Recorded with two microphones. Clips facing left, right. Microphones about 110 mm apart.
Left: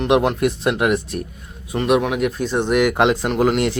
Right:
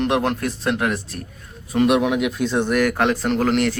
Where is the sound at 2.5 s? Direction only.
15° left (ahead or behind).